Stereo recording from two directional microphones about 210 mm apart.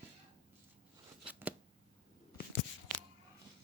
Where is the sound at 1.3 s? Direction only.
10° right (ahead or behind).